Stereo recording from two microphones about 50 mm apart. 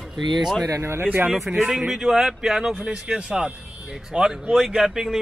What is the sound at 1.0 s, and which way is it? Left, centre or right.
Speech, right.